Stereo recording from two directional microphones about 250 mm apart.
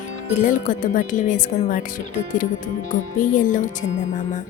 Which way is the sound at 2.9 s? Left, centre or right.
Left.